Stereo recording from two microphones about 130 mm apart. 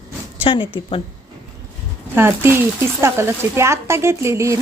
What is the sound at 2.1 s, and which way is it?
Speech, 20° right (ahead or behind).